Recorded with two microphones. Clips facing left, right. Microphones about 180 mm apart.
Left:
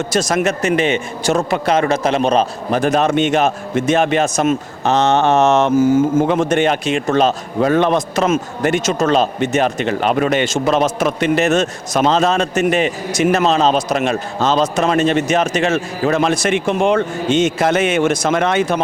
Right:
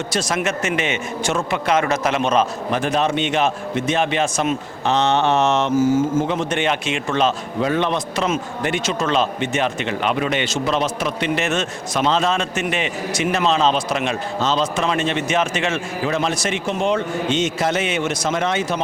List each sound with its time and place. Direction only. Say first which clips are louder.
0.1 s a man's voice: left 6 dB; 45° left (ahead or behind)